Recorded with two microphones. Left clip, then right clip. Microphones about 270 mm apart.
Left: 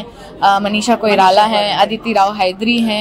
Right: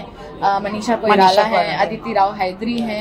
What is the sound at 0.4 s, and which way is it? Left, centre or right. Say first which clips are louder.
A man's voice: left 6 dB; left.